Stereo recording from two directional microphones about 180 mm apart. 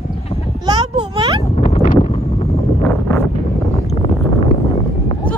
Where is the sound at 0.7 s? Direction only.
25° right (ahead or behind).